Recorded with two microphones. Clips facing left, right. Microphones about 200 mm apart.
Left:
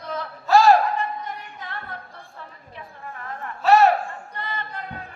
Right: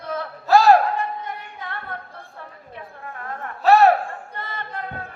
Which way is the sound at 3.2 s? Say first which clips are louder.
Right 2 dB; 50° right (ahead or behind).